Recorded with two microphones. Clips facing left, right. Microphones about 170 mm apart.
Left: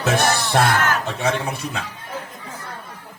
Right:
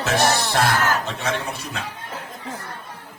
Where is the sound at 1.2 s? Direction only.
55° left (ahead or behind).